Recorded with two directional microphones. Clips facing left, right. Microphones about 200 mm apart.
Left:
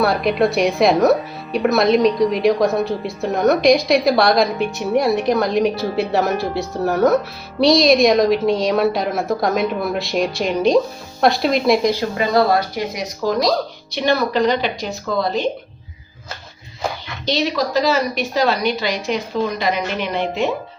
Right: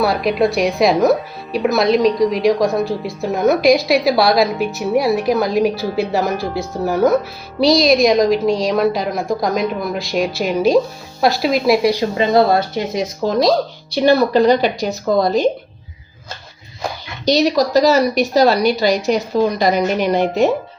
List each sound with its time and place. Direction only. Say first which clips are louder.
0.0 s a woman's voice: right 1 dB; centre (ahead or behind)
12.1 s speech: right 3 dB; 25° right (ahead or behind); by 15.4 s 40° right (ahead or behind)
17.2 s speech: right 6 dB; 40° right (ahead or behind)